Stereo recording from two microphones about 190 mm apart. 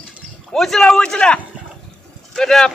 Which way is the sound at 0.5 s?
Centre (ahead or behind).